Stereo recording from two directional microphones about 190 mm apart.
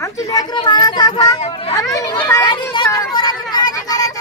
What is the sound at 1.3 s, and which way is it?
Speech, 30° left (ahead or behind).